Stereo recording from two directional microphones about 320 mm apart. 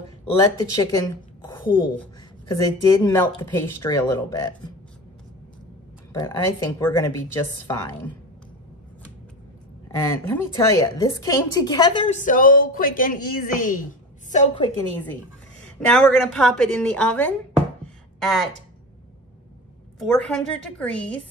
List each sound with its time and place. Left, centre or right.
0.2 s speech: centre
6.1 s speech: centre
10.0 s a woman's voice: centre
15.8 s a woman's voice: centre
17.8 s music: centre
20.0 s a woman's voice: centre